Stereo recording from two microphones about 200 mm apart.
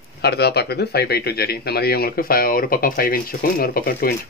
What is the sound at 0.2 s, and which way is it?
Speech, 55° left (ahead or behind).